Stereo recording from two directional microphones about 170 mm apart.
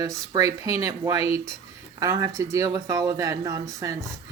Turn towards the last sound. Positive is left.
turn(degrees=-20)  # may be behind; listen again after turning